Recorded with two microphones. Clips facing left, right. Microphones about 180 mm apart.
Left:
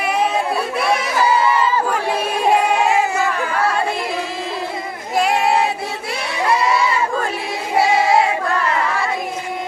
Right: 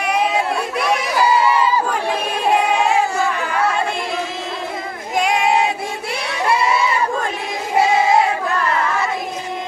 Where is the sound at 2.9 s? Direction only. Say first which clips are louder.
Even; centre (ahead or behind).